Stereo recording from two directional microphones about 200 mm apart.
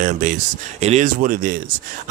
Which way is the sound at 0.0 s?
40° right (ahead or behind).